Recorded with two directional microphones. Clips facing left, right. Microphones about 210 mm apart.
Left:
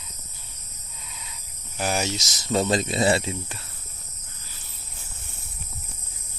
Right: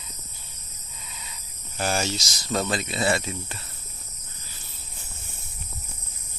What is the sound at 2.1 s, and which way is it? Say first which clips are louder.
Speech: left 3 dB; 20° left (ahead or behind).